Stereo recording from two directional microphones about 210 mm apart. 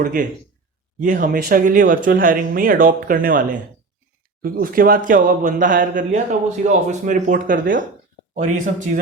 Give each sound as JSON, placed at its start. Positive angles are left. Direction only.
{"t": 0.0, "sound": "speech", "side_deg": -40}